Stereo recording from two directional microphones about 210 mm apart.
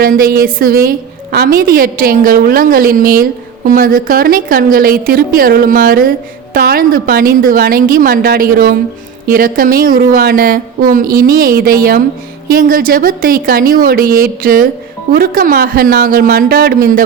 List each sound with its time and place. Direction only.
0.0 s a woman's voice: 45° right (ahead or behind)